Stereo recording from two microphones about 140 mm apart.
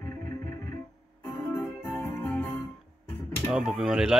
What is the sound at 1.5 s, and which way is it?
Music, 15° left (ahead or behind).